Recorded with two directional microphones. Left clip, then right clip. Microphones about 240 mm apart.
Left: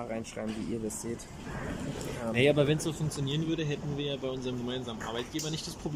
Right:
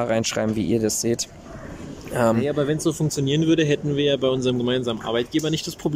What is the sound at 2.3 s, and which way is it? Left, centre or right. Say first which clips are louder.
Speech: right 3 dB; centre.